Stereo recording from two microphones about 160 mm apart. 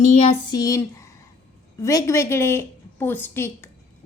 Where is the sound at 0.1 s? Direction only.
40° left (ahead or behind).